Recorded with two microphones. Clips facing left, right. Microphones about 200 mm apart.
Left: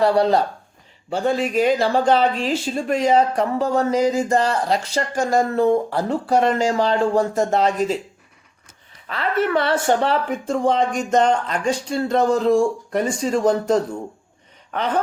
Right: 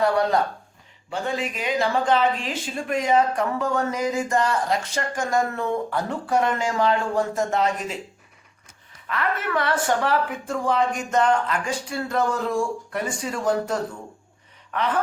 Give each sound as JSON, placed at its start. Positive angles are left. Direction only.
{"t": 0.0, "sound": "speech", "side_deg": 30}
{"t": 9.0, "sound": "speech", "side_deg": 30}
{"t": 14.7, "sound": "gasp", "side_deg": 30}